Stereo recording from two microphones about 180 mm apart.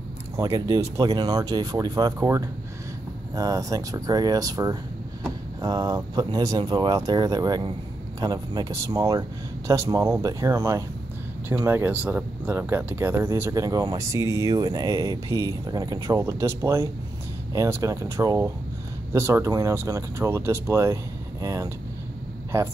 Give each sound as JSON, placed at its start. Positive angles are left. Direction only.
{"t": 0.4, "sound": "speech", "side_deg": -20}